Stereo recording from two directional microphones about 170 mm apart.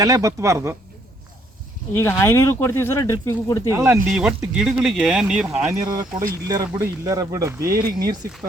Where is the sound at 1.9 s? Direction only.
15° left (ahead or behind).